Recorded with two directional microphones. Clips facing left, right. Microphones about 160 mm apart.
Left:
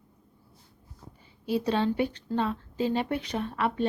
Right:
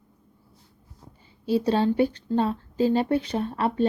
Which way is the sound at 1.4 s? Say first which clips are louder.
Right 4 dB; 30° right (ahead or behind).